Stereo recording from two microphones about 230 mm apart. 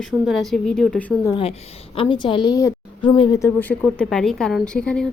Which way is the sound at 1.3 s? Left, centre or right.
Left.